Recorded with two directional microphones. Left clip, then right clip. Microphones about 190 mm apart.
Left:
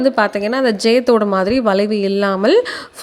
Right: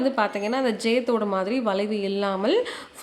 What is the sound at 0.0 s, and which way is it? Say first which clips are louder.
Speech: left 9 dB; 35° left (ahead or behind).